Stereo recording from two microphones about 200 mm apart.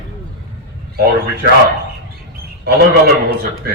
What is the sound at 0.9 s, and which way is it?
Speech, 55° right (ahead or behind).